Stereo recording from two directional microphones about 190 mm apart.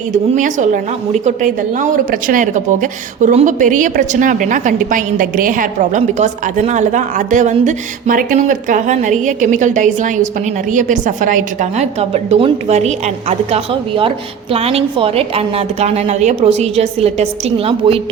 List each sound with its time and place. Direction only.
0.3 s a woman's voice: 40° right (ahead or behind)